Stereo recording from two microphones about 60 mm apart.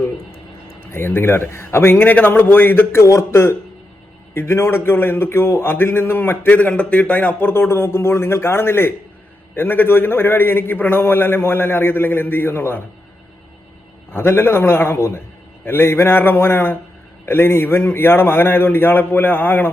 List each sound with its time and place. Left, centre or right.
0.8 s speech: left
3.0 s a man's voice: left
14.1 s a man's voice: left